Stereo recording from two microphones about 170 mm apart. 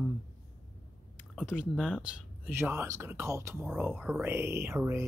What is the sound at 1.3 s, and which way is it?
Speech, 5° right (ahead or behind).